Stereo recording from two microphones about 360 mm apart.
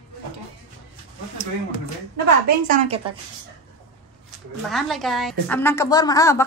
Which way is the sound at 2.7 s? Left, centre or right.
Centre.